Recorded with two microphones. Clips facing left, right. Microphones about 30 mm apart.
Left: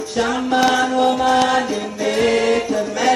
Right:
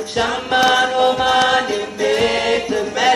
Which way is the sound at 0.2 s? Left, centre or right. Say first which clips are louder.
Right 1 dB; right.